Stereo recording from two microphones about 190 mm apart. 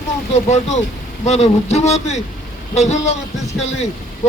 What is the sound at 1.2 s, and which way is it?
Speech, 35° left (ahead or behind).